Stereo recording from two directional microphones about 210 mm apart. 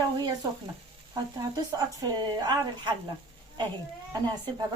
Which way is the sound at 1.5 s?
20° right (ahead or behind).